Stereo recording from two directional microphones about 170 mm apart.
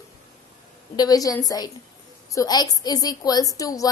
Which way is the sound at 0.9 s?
20° left (ahead or behind).